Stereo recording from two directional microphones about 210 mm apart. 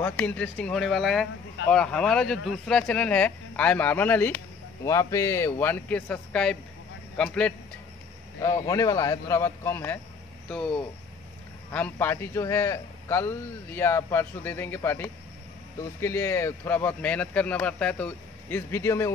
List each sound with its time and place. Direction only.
0.0 s a man's voice: 10° left (ahead or behind)
8.4 s a man's voice: 15° left (ahead or behind)
11.7 s a man's voice: 10° left (ahead or behind)